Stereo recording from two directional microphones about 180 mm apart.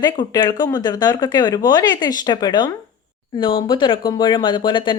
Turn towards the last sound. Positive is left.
turn(degrees=25)  # may be behind; listen again after turning